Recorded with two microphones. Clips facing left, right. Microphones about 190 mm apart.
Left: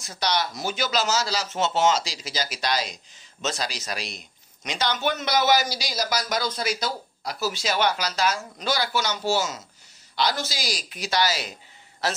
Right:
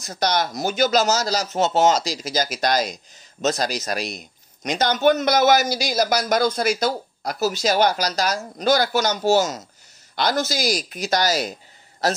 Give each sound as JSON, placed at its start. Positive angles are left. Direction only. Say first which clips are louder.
{"t": 0.0, "sound": "a man's voice", "louder": "right 4 dB", "side_deg": -45}